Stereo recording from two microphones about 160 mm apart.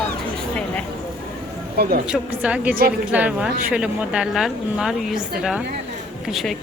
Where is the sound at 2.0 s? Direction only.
5° right (ahead or behind).